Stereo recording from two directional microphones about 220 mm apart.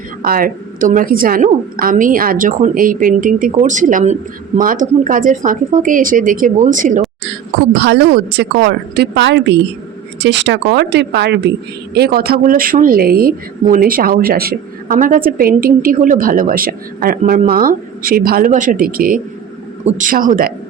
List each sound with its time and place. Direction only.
0.2 s a woman's voice: 40° right (ahead or behind)
7.7 s a woman's voice: 50° right (ahead or behind)